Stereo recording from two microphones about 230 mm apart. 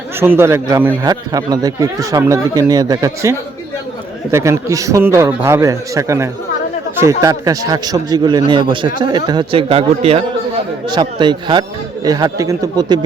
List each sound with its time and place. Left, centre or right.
0.2 s speech: centre